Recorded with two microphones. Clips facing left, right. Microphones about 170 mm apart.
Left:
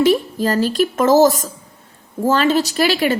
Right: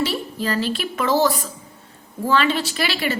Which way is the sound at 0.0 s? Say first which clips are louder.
Left 9 dB; 45° left (ahead or behind).